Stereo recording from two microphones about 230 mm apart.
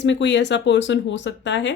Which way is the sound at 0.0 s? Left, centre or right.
Left.